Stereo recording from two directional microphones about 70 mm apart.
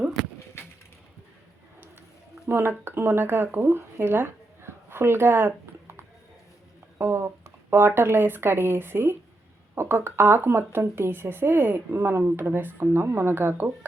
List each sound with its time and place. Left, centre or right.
2.5 s speech: right